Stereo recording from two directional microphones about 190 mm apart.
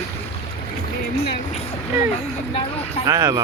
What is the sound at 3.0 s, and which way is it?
Speech, 20° right (ahead or behind).